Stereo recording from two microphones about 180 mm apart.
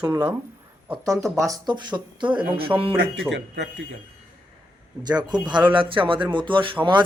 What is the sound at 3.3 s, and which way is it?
Speech, 80° right.